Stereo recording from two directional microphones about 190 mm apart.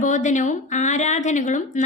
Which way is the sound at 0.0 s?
40° left (ahead or behind).